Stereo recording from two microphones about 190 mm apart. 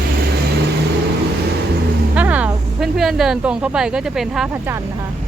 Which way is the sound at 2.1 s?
5° right (ahead or behind).